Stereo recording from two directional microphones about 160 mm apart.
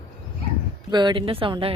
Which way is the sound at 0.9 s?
25° right (ahead or behind).